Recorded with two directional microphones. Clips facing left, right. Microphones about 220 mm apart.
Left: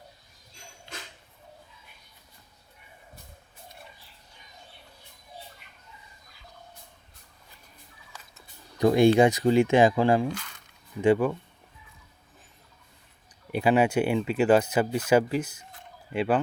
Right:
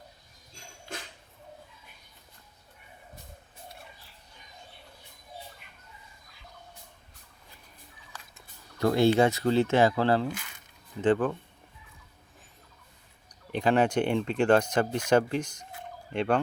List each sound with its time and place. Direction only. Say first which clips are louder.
8.8 s speech: left 3 dB; 15° left (ahead or behind)
13.5 s speech: left 2 dB; 10° left (ahead or behind)